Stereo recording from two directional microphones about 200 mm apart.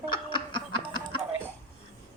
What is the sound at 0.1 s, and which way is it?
Snicker, 25° left (ahead or behind).